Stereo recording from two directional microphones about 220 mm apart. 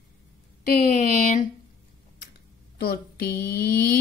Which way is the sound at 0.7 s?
35° left (ahead or behind).